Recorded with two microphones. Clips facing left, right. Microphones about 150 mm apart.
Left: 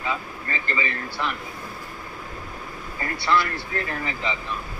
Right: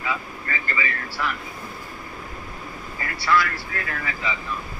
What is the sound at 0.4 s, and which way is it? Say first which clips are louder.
Speech: even; 25° left (ahead or behind).